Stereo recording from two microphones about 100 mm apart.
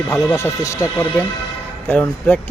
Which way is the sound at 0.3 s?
30° left (ahead or behind).